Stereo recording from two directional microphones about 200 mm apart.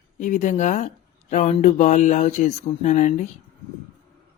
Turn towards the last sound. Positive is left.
turn(degrees=40)  # may be behind; listen again after turning